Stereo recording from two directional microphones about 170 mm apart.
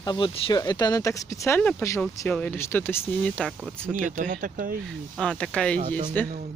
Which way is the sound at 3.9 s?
50° right (ahead or behind).